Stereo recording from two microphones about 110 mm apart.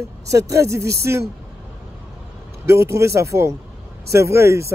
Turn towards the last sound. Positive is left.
turn(degrees=-25)  # may be behind; listen again after turning